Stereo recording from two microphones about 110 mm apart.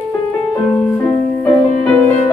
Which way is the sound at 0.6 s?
10° left (ahead or behind).